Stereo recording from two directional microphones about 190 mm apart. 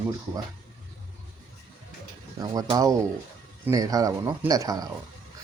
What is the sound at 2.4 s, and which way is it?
Speech, 20° right (ahead or behind).